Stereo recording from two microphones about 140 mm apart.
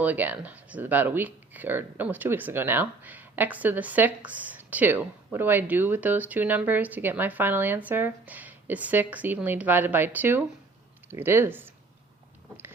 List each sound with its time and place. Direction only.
0.0 s speech: 10° right (ahead or behind)